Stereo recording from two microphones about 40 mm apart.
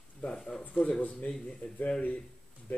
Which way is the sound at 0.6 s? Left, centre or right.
Left.